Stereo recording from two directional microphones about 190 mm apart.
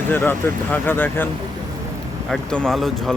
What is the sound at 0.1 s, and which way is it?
Speech, 10° left (ahead or behind).